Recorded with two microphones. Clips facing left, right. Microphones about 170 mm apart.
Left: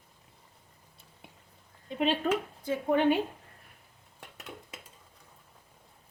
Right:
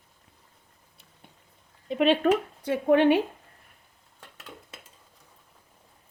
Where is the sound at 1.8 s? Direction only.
75° right (ahead or behind).